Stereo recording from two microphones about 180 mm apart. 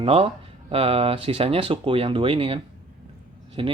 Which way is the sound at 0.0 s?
35° right (ahead or behind).